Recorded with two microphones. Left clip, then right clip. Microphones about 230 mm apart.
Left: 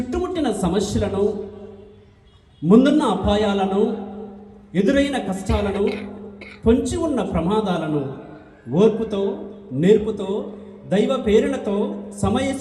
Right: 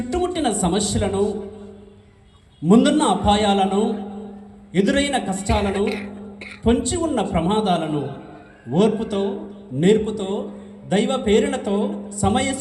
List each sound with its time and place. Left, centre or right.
0.1 s speech: right
2.6 s speech: right